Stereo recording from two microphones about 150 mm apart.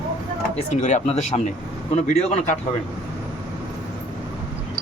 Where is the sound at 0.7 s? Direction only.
50° left (ahead or behind).